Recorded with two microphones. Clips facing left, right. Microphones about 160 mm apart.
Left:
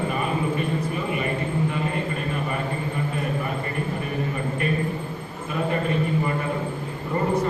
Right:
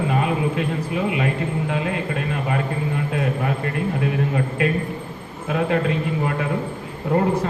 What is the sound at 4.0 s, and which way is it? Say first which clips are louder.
A woman's voice: right 5 dB; 75° right (ahead or behind).